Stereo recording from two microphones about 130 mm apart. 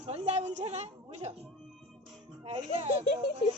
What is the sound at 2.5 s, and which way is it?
Speech, 50° right (ahead or behind).